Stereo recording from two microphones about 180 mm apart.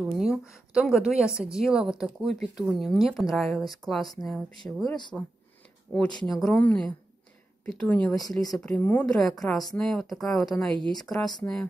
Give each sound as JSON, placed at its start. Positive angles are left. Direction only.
{"t": 0.0, "sound": "a woman's voice", "side_deg": -5}
{"t": 4.8, "sound": "speech", "side_deg": 25}
{"t": 6.2, "sound": "a woman's voice", "side_deg": 5}